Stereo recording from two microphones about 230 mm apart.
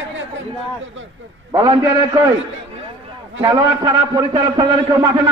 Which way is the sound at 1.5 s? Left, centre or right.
Centre.